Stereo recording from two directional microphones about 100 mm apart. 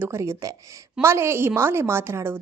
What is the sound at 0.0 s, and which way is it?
Speech, 25° right (ahead or behind).